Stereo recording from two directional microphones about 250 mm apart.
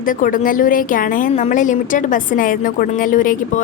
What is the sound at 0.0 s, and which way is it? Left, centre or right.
A woman's voice, left.